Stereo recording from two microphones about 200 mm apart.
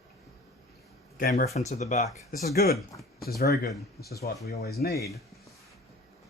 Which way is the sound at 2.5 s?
50° left (ahead or behind).